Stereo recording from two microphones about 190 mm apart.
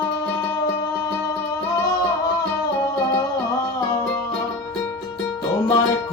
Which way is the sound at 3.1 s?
20° left (ahead or behind).